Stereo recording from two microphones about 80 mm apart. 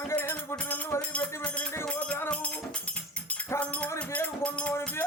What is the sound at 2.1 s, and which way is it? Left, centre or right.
Music, centre.